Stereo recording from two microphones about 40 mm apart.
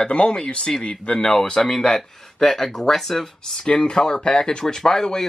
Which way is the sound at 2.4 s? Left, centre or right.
Centre.